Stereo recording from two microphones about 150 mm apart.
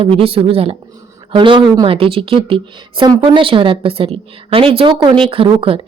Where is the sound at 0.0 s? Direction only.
40° right (ahead or behind).